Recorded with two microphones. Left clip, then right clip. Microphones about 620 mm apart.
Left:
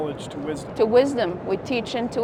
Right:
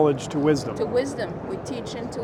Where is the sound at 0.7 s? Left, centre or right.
Left.